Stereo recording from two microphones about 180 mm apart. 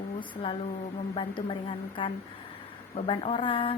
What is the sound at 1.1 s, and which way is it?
A woman's voice, 30° left (ahead or behind).